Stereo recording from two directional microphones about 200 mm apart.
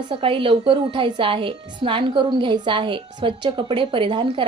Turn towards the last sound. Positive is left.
turn(degrees=-25)  # may be behind; listen again after turning